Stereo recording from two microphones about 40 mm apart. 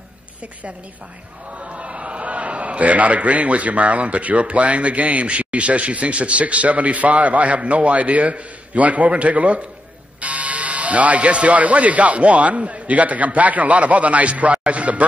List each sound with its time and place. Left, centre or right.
1.6 s a man's voice: right